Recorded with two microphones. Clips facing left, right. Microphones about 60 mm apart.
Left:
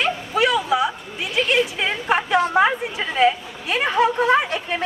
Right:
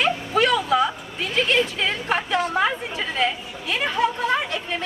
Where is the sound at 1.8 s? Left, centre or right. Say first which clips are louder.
Left 3 dB; centre.